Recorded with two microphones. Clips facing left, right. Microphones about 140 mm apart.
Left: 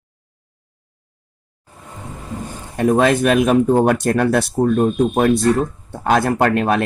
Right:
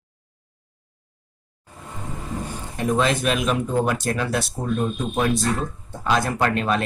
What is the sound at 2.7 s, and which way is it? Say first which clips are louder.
Speech: left 7 dB; 60° left (ahead or behind).